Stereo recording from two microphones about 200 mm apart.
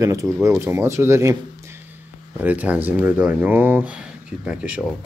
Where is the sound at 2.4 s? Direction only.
10° right (ahead or behind).